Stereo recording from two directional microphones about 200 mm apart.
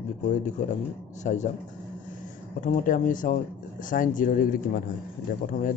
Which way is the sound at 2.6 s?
40° left (ahead or behind).